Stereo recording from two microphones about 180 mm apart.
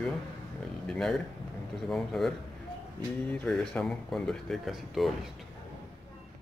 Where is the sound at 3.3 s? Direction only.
5° left (ahead or behind).